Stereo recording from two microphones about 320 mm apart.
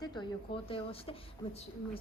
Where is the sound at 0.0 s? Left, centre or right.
Centre.